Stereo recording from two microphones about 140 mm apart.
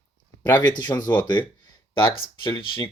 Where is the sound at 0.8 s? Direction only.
30° left (ahead or behind).